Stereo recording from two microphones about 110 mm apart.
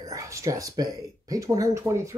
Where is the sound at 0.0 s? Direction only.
30° right (ahead or behind).